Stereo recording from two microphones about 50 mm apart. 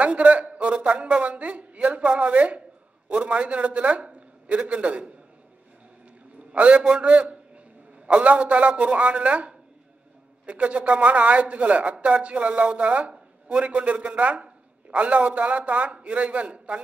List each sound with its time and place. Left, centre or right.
0.0 s a man's voice: right
6.5 s a man's voice: right